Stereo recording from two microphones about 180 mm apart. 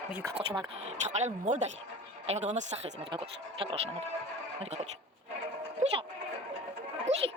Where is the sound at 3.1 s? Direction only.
30° right (ahead or behind).